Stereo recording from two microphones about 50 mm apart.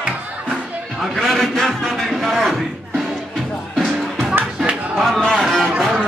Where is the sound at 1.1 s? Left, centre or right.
Centre.